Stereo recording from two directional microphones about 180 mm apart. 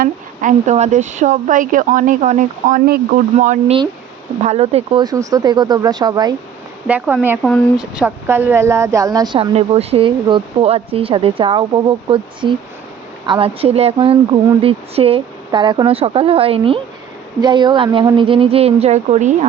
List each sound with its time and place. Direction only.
0.0 s a woman's voice: 40° right (ahead or behind)
3.3 s speech: 40° right (ahead or behind); by 6.3 s 20° right (ahead or behind)
6.8 s speech: 10° right (ahead or behind); by 19.5 s 40° right (ahead or behind)